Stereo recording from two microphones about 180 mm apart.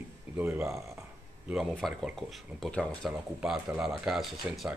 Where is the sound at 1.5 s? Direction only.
Centre (ahead or behind).